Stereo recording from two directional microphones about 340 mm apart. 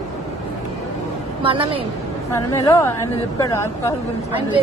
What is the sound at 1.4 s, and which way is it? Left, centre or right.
Speech, centre.